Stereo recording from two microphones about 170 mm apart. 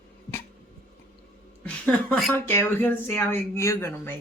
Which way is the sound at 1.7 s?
5° left (ahead or behind).